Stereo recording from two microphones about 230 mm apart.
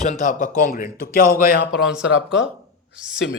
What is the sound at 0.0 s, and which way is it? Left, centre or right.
Speech, left.